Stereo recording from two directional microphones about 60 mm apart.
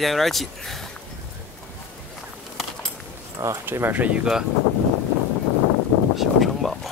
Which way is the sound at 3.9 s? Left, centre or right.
Right.